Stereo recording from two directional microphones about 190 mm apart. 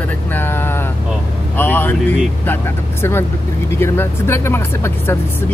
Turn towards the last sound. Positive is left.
turn(degrees=10)  # may be behind; listen again after turning